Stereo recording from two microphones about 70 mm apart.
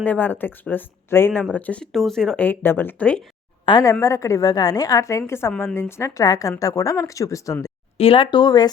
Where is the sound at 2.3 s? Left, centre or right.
Left.